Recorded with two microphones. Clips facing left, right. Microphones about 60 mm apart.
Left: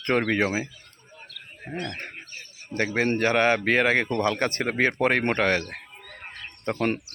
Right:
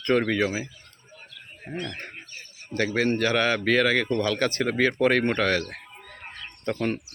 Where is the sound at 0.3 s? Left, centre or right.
Left.